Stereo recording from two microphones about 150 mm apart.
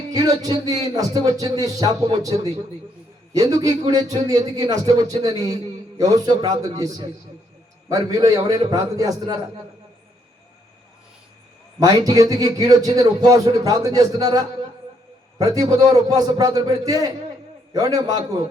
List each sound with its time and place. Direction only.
0.1 s a man's voice: 25° right (ahead or behind)
11.8 s a man's voice: 25° right (ahead or behind)